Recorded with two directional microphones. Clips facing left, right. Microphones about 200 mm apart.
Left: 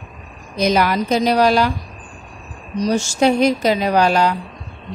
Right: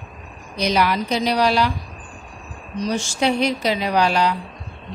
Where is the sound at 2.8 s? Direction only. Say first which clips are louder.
Left 5 dB; 45° left (ahead or behind).